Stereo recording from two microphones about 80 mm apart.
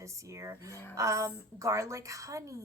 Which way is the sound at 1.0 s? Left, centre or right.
Right.